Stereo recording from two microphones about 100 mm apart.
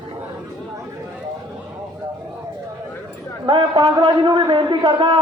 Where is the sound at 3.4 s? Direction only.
55° right (ahead or behind).